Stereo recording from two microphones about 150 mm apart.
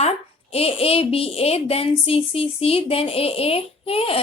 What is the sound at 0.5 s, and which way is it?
A woman's voice, 40° left (ahead or behind).